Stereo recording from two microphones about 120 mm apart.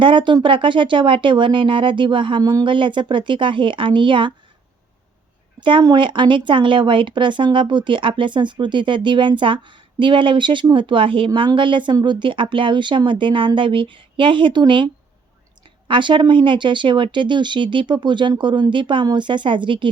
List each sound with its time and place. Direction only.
0.0 s speech: 40° right (ahead or behind)
5.5 s speech: 45° right (ahead or behind)
15.9 s speech: 40° right (ahead or behind)